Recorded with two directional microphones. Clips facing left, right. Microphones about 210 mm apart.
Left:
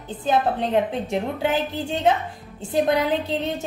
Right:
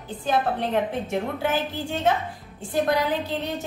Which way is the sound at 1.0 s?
20° left (ahead or behind).